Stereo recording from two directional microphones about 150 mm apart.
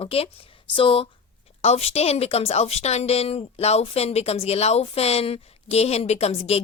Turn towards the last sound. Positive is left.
turn(degrees=40)  # may be behind; listen again after turning